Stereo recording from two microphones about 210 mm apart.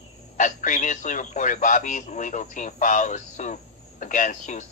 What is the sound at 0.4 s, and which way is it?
A man's voice, 35° left (ahead or behind).